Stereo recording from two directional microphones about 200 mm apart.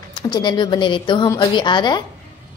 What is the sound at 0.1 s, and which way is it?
A woman's voice, 20° left (ahead or behind).